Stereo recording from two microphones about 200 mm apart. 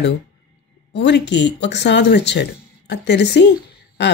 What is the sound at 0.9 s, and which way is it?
Speech, 60° left (ahead or behind).